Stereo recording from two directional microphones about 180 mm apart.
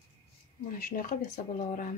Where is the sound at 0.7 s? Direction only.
50° left (ahead or behind).